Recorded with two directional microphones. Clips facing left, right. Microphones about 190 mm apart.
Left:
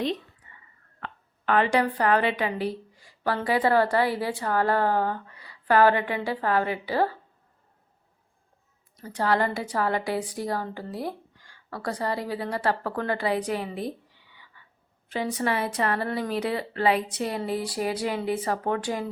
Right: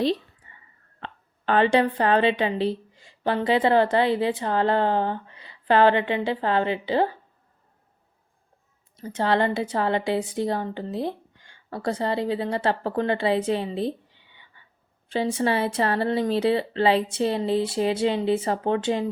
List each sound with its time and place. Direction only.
0.9 s a woman's voice: 30° right (ahead or behind)
9.0 s a woman's voice: 25° right (ahead or behind)